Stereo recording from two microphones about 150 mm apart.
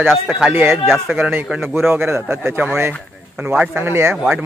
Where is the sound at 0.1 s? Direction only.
5° right (ahead or behind).